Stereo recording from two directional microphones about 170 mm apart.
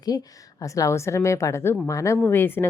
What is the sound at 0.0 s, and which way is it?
A woman's voice, 20° left (ahead or behind).